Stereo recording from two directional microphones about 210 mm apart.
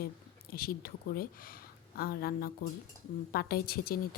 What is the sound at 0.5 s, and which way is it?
Speech, 45° left (ahead or behind).